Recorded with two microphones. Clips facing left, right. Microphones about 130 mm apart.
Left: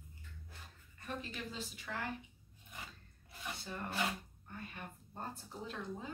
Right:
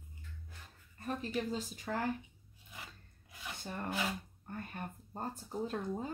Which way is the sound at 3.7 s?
40° right (ahead or behind).